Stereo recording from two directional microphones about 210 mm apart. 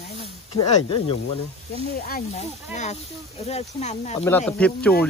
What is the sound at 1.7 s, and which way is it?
Speech, 45° left (ahead or behind).